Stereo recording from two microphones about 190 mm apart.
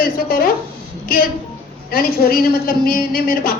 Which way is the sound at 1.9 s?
50° left (ahead or behind).